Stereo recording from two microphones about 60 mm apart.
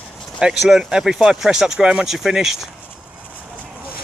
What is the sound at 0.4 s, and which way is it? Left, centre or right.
Speech, centre.